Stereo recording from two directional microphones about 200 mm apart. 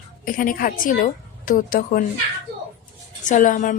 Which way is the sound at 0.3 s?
45° left (ahead or behind).